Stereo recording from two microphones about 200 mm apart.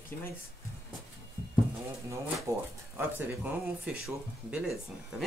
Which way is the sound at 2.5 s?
15° right (ahead or behind).